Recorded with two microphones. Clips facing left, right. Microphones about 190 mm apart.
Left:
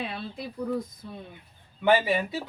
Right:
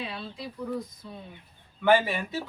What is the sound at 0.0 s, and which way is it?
Speech, 50° left (ahead or behind).